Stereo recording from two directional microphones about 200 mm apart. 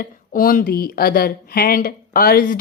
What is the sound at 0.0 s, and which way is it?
Speech, 45° left (ahead or behind).